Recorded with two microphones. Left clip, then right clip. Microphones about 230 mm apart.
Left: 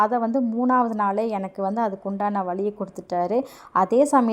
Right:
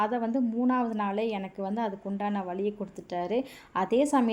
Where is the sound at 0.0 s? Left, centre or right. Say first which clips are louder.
Left 7 dB; left.